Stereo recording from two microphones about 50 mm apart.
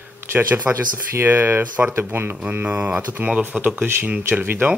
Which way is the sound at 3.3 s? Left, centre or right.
Right.